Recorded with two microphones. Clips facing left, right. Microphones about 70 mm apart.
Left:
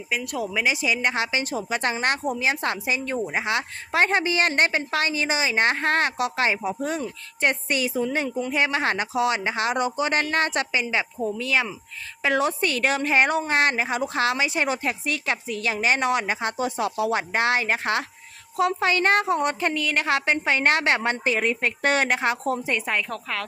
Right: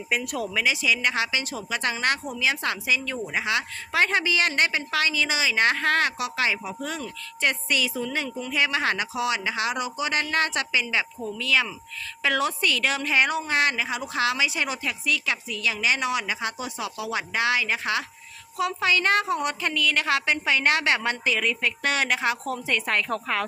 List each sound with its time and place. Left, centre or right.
0.1 s speech: centre
0.3 s speech: centre
0.6 s a woman's voice: left
22.9 s speech: centre